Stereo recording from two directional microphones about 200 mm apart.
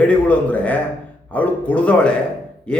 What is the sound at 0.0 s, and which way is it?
A man's voice, 5° left (ahead or behind).